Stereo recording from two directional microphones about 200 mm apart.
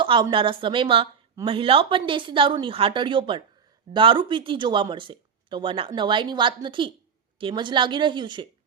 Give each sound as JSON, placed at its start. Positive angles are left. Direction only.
{"t": 0.0, "sound": "speech", "side_deg": -25}